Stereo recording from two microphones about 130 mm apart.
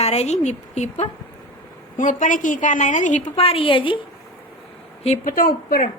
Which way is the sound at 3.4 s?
45° left (ahead or behind).